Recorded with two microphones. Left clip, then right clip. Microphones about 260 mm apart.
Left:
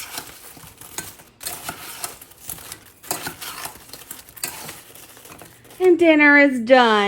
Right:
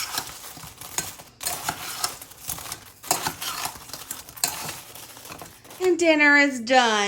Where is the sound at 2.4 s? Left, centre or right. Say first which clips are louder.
Right 3 dB; centre.